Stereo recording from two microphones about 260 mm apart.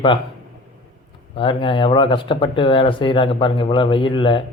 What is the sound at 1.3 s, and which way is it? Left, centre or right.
A man's voice, centre.